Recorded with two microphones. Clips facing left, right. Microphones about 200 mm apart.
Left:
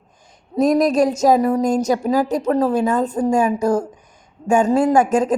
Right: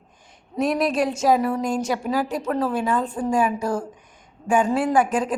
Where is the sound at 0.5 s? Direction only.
40° left (ahead or behind).